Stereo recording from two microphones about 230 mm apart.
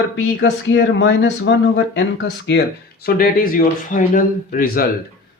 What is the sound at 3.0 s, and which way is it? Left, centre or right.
A man's voice, left.